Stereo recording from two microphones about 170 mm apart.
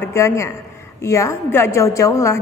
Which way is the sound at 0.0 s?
15° left (ahead or behind).